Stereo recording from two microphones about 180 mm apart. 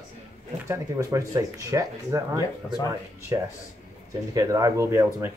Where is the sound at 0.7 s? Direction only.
15° right (ahead or behind).